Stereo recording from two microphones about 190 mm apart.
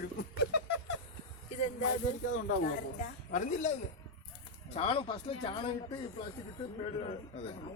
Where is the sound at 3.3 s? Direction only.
40° left (ahead or behind).